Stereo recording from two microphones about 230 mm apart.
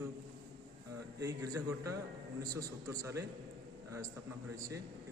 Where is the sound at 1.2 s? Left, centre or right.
Centre.